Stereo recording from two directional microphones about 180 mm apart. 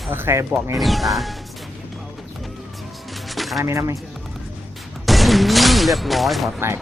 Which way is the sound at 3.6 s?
15° right (ahead or behind).